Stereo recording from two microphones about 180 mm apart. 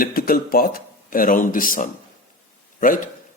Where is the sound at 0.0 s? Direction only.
55° left (ahead or behind).